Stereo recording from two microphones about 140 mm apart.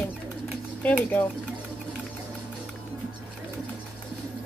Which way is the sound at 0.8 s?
10° left (ahead or behind).